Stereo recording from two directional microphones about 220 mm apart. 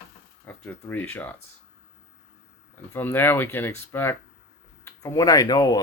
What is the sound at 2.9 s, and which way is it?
Speech, 10° left (ahead or behind).